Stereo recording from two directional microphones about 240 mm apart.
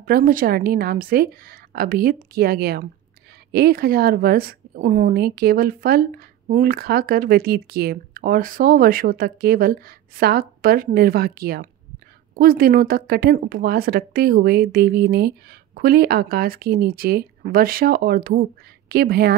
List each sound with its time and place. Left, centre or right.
0.0 s a woman's voice: right